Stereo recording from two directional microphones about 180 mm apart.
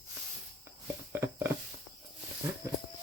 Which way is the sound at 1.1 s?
15° right (ahead or behind).